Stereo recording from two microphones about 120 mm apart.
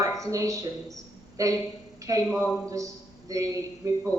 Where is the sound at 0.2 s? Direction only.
25° right (ahead or behind).